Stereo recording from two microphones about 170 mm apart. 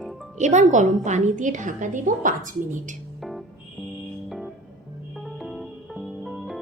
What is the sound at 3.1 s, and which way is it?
Music, centre (ahead or behind).